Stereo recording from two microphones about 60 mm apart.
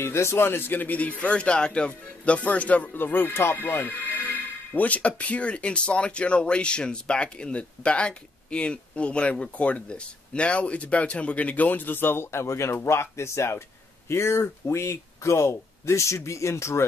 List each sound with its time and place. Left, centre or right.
0.0 s speech: left
4.7 s speech: left